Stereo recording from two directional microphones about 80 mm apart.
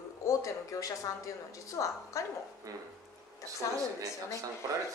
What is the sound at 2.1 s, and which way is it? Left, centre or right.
Speech, left.